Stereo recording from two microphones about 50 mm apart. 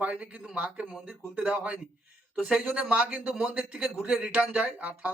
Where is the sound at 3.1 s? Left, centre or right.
Right.